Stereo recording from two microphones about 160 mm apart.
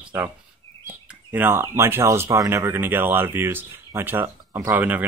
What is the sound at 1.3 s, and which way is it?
Speech, 15° right (ahead or behind).